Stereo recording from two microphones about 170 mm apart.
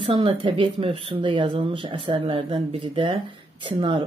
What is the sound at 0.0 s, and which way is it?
Speech, 35° right (ahead or behind).